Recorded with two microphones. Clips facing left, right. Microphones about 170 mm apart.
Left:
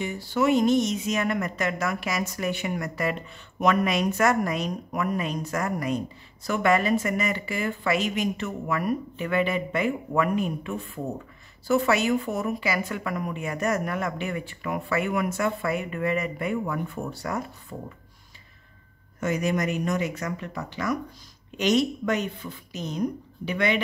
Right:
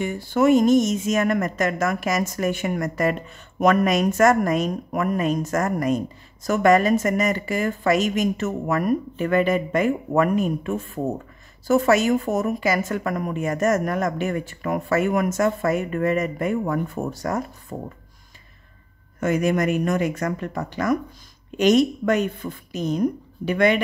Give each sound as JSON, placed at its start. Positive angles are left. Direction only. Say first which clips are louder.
{"t": 0.0, "sound": "speech", "louder": "right 5 dB", "side_deg": -50}
{"t": 19.1, "sound": "speech", "louder": "right 5 dB", "side_deg": -55}